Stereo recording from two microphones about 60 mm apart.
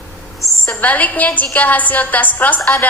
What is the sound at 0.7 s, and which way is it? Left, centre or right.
A woman's voice, left.